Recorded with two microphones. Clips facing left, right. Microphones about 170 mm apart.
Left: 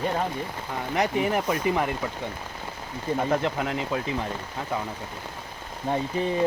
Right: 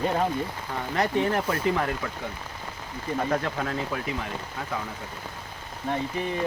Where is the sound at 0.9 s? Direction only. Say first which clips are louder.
Even; 10° left (ahead or behind).